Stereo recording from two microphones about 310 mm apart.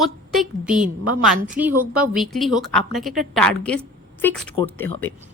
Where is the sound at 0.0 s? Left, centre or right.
Centre.